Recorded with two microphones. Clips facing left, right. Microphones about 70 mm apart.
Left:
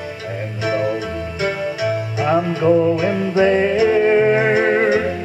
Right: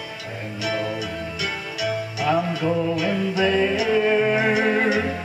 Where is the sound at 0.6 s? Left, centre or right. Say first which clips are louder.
Left 6 dB; left.